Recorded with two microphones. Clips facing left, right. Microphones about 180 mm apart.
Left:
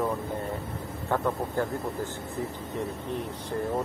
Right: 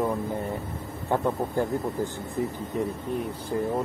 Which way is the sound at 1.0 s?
15° right (ahead or behind).